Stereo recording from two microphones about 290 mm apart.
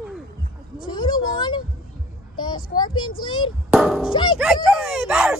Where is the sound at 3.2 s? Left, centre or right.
Centre.